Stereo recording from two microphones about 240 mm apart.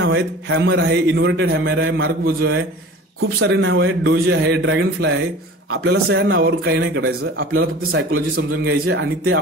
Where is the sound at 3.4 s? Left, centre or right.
Right.